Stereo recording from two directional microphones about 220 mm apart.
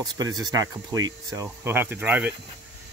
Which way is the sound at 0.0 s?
15° right (ahead or behind).